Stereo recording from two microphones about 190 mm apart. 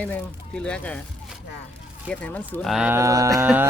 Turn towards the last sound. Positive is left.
turn(degrees=-10)  # may be behind; listen again after turning